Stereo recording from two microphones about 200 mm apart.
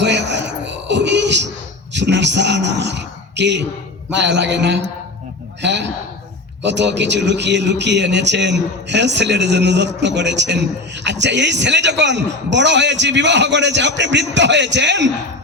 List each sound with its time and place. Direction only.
0.0 s music: 60° right (ahead or behind)
1.9 s a man's voice: 60° right (ahead or behind)